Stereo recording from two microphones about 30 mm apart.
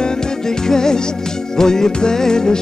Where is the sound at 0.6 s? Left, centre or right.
Centre.